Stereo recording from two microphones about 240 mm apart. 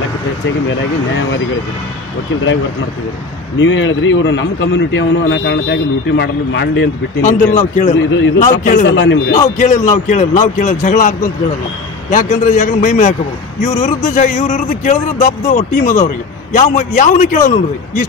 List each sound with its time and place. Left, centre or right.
3.5 s a man's voice: left
7.2 s speech: left
8.8 s a man's voice: left
9.6 s speech: left